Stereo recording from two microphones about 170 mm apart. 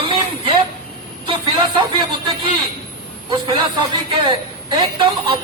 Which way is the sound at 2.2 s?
25° right (ahead or behind).